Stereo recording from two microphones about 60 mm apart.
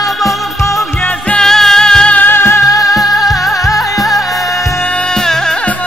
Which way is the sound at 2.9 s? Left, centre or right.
Centre.